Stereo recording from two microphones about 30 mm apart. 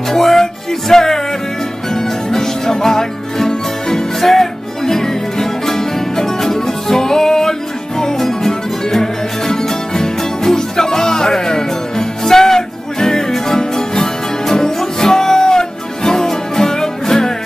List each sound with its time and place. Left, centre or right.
0.1 s music: centre